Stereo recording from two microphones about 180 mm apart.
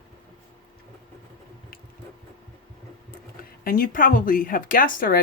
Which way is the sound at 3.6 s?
50° left (ahead or behind).